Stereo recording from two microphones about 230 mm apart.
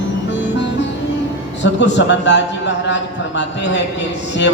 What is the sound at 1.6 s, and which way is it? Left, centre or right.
A man's voice, left.